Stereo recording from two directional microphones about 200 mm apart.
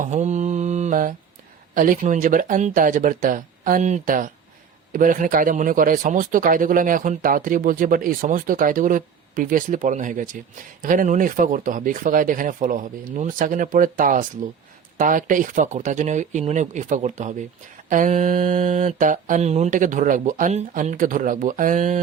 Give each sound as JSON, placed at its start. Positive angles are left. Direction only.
{"t": 0.0, "sound": "mantra", "side_deg": -35}
{"t": 4.9, "sound": "speech", "side_deg": -40}
{"t": 10.8, "sound": "mantra", "side_deg": -40}